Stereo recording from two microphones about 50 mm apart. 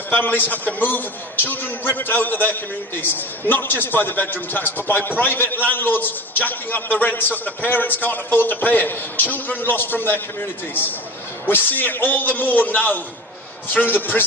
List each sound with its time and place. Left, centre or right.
0.1 s a man's voice: left